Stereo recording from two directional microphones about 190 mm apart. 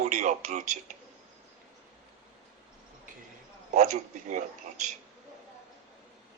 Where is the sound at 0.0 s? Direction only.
40° right (ahead or behind).